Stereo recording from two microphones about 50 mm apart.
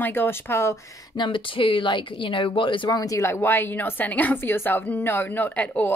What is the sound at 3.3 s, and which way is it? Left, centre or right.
Speech, left.